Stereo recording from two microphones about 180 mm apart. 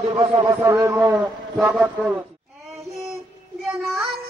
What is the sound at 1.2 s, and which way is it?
Speech, 5° right (ahead or behind).